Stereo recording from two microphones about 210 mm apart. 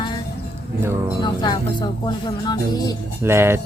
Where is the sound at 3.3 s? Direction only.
10° right (ahead or behind).